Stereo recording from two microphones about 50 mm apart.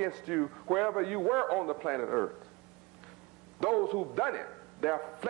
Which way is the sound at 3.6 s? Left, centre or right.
Centre.